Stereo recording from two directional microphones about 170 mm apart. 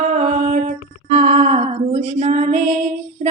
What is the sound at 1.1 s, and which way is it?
Female singing, 40° right (ahead or behind).